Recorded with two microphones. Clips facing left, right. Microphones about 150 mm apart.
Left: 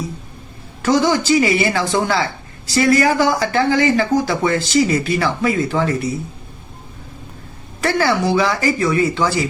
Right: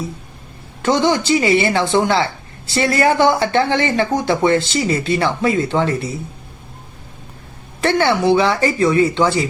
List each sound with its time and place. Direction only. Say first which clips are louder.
0.8 s speech: even; 25° right (ahead or behind)
7.8 s speech: right 1 dB; 25° right (ahead or behind)